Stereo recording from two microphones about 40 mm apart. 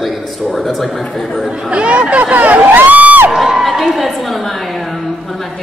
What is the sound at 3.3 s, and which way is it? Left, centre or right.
Crowd, centre.